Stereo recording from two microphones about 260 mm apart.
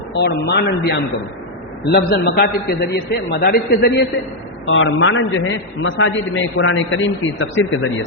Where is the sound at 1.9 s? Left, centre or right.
Left.